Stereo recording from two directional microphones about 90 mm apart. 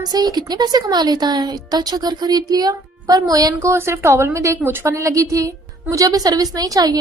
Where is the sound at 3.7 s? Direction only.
30° right (ahead or behind).